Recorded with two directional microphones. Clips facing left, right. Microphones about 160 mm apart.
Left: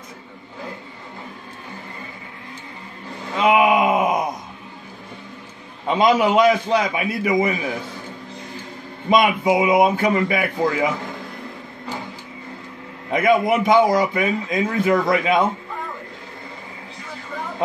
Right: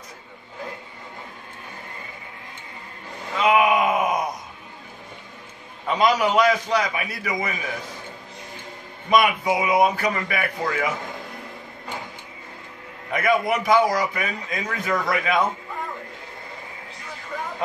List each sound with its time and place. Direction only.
3.3 s groan: 25° left (ahead or behind)
5.9 s a man's voice: 25° left (ahead or behind)
9.1 s a man's voice: 25° left (ahead or behind)
13.1 s a man's voice: 20° left (ahead or behind)